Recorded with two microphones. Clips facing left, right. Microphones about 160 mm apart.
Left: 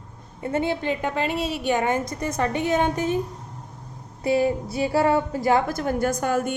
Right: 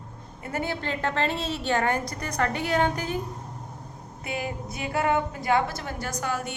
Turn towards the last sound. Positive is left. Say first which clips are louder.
# left 8 dB
turn(degrees=50)  # may be behind; listen again after turning